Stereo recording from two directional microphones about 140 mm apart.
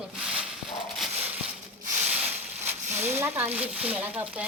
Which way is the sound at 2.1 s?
10° right (ahead or behind).